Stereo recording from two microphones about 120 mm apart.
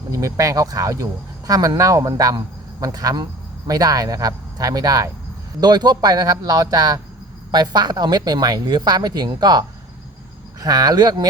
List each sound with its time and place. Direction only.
0.1 s speech: 25° right (ahead or behind)